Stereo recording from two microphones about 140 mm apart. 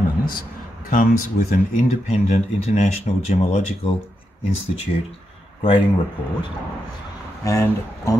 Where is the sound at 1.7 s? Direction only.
60° left (ahead or behind).